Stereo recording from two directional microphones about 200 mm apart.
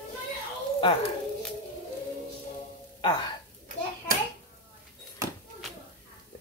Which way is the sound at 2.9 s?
25° left (ahead or behind).